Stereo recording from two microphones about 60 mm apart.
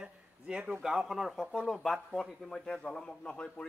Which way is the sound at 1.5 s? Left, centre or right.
Centre.